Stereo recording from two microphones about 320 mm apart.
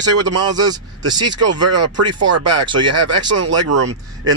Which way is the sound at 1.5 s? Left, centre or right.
Right.